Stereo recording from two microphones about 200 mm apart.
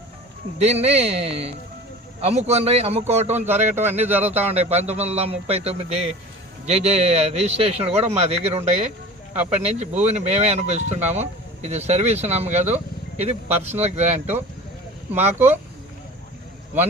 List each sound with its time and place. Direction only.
0.6 s speech: 30° right (ahead or behind)
3.7 s speech: 10° right (ahead or behind)
4.5 s speech: 30° right (ahead or behind)